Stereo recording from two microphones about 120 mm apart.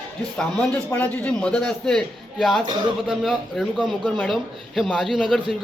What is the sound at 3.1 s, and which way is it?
Speech, centre (ahead or behind).